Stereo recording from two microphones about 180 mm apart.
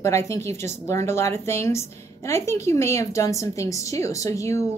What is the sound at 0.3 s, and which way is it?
A woman's voice, 15° left (ahead or behind).